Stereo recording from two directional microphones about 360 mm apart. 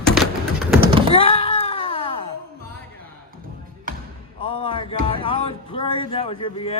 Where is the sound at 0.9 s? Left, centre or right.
Centre.